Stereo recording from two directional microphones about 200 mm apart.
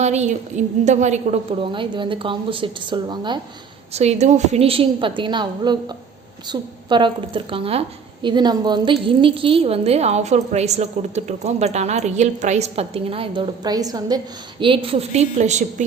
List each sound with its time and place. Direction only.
0.0 s a woman's voice: 35° right (ahead or behind)
3.9 s a woman's voice: 35° right (ahead or behind)